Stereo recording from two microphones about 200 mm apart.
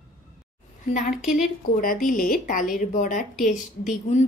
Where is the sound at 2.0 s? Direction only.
45° left (ahead or behind).